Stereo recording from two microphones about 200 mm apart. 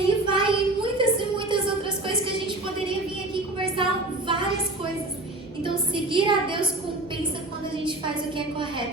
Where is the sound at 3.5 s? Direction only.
25° right (ahead or behind).